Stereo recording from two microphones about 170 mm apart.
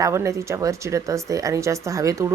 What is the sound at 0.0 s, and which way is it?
Speech, 15° right (ahead or behind).